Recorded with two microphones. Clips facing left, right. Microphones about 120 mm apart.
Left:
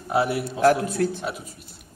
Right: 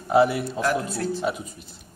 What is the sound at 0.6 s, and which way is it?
Speech, 55° left (ahead or behind).